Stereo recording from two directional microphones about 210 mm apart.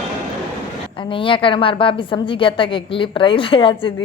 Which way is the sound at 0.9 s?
25° left (ahead or behind).